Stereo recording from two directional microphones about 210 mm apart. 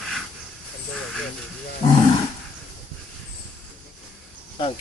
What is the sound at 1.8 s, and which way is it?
Roaring cats, 25° left (ahead or behind).